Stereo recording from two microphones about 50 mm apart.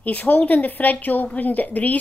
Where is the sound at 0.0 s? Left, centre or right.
Left.